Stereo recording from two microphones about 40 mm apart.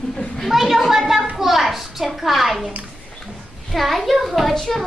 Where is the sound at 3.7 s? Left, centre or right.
Centre.